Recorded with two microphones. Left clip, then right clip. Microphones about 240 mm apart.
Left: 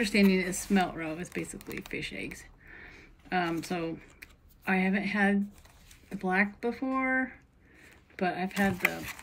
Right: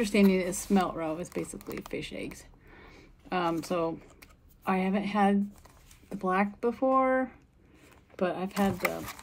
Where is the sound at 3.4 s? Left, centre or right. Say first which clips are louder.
Right 4 dB; centre.